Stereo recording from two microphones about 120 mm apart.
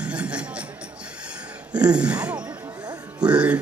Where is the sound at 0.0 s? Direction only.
10° right (ahead or behind).